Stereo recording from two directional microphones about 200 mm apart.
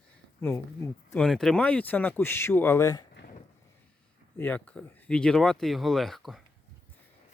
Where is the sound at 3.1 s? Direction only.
55° left (ahead or behind).